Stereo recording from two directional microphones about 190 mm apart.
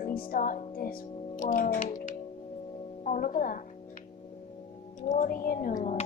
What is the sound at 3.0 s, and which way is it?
Music, 45° left (ahead or behind).